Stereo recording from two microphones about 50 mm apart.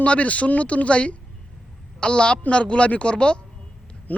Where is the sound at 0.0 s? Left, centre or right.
Left.